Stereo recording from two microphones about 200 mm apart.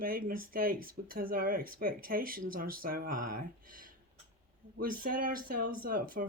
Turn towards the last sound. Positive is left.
turn(degrees=-45)  # may be behind; listen again after turning